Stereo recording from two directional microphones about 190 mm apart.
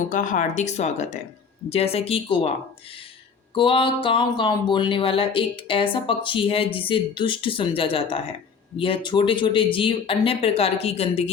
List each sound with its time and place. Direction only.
0.1 s speech: 45° left (ahead or behind)
3.5 s speech: 25° left (ahead or behind)